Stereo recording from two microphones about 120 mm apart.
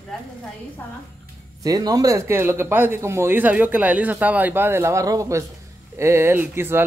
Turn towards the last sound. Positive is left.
turn(degrees=-20)  # may be behind; listen again after turning